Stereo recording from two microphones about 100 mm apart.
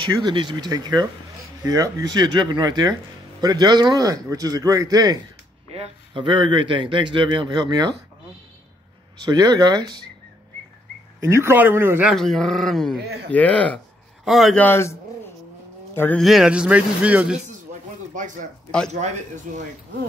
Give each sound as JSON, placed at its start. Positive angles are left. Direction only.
{"t": 0.0, "sound": "speech", "side_deg": -55}
{"t": 5.7, "sound": "speech", "side_deg": -90}
{"t": 6.1, "sound": "speech", "side_deg": -55}
{"t": 9.2, "sound": "speech", "side_deg": -45}
{"t": 11.1, "sound": "speech", "side_deg": -25}
{"t": 12.2, "sound": "speech", "side_deg": 5}
{"t": 13.3, "sound": "speech", "side_deg": 15}
{"t": 14.2, "sound": "speech", "side_deg": 0}
{"t": 14.5, "sound": "speech", "side_deg": 20}
{"t": 16.2, "sound": "speech", "side_deg": 0}